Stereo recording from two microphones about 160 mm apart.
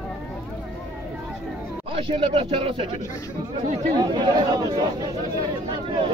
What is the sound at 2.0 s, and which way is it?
Speech, 35° right (ahead or behind).